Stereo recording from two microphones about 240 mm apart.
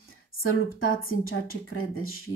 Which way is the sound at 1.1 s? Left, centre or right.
Left.